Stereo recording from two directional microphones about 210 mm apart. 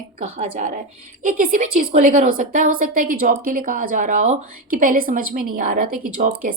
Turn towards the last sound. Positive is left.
turn(degrees=-40)  # may be behind; listen again after turning